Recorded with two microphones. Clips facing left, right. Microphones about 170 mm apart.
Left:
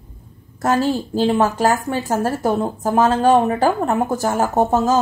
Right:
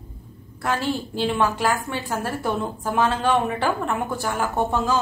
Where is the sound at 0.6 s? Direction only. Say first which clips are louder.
Left 7 dB; 45° left (ahead or behind).